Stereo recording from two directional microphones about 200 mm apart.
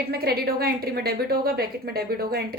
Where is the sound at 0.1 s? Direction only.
50° right (ahead or behind).